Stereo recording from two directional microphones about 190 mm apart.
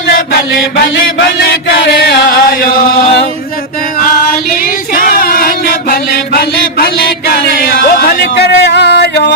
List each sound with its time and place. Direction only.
4.9 s chant: 50° left (ahead or behind)